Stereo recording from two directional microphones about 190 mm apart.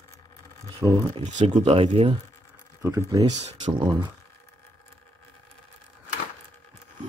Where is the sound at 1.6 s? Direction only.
30° right (ahead or behind).